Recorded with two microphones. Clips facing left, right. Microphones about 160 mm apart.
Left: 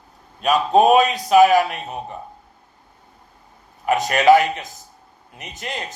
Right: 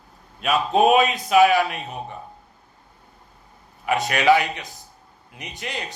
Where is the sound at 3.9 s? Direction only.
40° left (ahead or behind).